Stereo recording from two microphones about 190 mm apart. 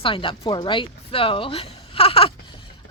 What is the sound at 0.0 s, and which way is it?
Speech, 25° left (ahead or behind).